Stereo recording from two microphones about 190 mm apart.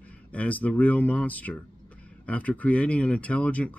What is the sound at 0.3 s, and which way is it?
Speech, 5° left (ahead or behind).